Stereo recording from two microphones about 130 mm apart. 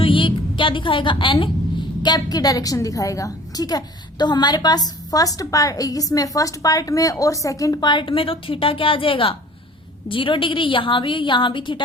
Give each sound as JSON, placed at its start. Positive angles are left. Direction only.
{"t": 0.0, "sound": "a woman's voice", "side_deg": 40}